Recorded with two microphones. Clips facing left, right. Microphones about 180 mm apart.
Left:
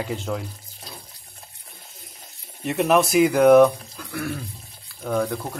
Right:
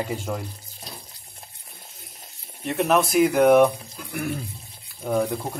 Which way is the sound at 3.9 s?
20° right (ahead or behind).